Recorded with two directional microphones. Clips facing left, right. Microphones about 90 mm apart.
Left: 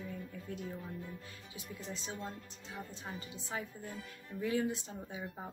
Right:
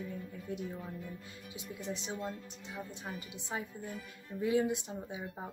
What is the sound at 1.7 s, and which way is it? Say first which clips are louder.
Speech: right 4 dB; 20° right (ahead or behind).